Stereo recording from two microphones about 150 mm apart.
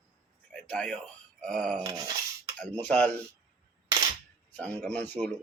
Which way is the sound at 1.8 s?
25° right (ahead or behind).